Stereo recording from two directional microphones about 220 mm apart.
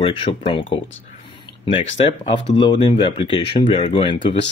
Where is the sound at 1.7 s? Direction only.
25° left (ahead or behind).